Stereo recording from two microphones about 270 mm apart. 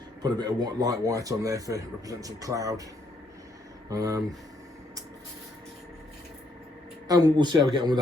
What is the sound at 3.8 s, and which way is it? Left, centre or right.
Speech, centre.